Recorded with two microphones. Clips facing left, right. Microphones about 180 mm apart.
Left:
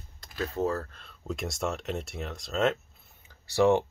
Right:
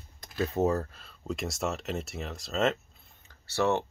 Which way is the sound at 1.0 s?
Centre (ahead or behind).